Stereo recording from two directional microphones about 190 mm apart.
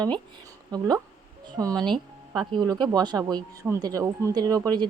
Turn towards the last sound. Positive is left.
turn(degrees=-20)  # may be behind; listen again after turning